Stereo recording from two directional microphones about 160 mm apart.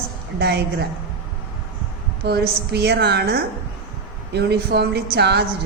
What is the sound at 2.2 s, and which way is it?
Speech, 90° right.